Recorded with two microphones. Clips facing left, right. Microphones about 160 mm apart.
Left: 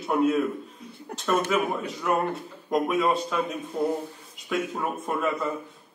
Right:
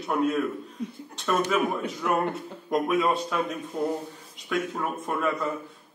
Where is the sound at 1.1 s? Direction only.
70° left (ahead or behind).